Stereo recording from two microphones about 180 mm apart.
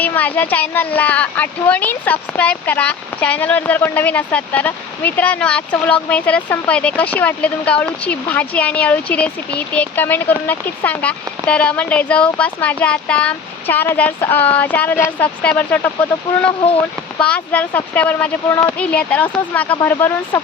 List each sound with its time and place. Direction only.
0.0 s speech: 10° left (ahead or behind)
17.2 s speech: 5° left (ahead or behind)